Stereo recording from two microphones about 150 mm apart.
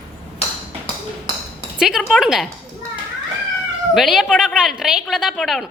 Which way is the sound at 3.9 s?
Centre (ahead or behind).